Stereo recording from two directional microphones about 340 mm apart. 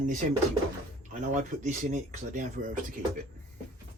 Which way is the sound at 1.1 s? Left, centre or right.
Right.